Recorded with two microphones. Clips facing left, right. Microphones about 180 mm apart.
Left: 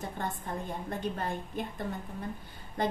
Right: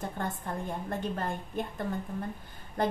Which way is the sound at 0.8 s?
50° right (ahead or behind).